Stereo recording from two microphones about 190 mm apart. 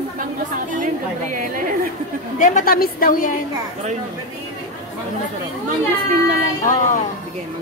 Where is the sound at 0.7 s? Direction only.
45° right (ahead or behind).